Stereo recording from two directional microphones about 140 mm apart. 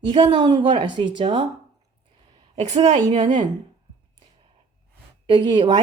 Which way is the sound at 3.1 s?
35° right (ahead or behind).